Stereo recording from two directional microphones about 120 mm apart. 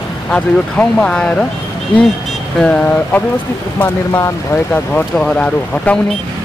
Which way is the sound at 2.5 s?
10° left (ahead or behind).